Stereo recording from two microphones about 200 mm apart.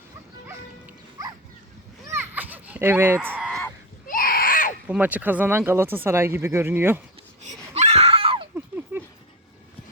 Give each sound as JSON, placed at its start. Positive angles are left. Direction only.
{"t": 0.4, "sound": "bow-wow", "side_deg": -10}
{"t": 2.0, "sound": "fowl", "side_deg": -10}
{"t": 4.0, "sound": "baby cry", "side_deg": 45}
{"t": 4.9, "sound": "speech", "side_deg": -10}
{"t": 7.4, "sound": "a sound", "side_deg": -35}
{"t": 8.5, "sound": "a sound", "side_deg": -10}